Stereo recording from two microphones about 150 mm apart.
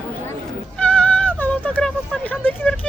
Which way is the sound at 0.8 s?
10° left (ahead or behind).